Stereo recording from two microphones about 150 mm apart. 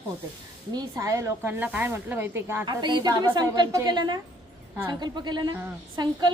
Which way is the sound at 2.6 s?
30° right (ahead or behind).